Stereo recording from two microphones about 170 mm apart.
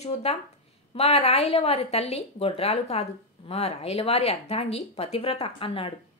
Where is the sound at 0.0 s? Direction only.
40° left (ahead or behind).